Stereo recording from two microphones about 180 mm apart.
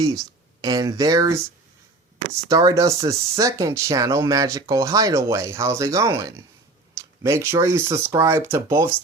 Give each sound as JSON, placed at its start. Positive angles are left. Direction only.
{"t": 0.6, "sound": "speech", "side_deg": -20}
{"t": 2.5, "sound": "speech", "side_deg": -20}